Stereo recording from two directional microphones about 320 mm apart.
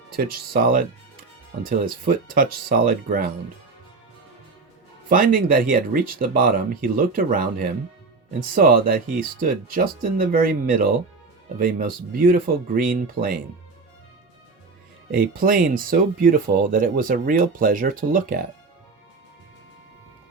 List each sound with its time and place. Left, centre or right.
0.1 s speech: right
5.0 s speech: right
15.1 s speech: right